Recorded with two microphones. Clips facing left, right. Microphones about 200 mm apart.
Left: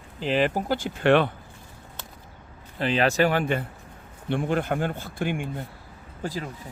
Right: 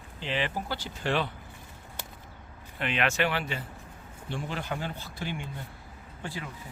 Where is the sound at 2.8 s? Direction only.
35° left (ahead or behind); by 5.4 s 55° left (ahead or behind).